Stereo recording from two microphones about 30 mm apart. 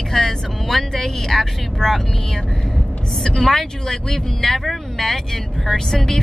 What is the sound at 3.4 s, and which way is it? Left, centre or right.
Speech, centre.